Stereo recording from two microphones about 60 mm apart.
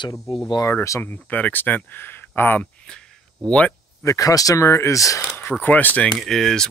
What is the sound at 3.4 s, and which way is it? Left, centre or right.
Speech, left.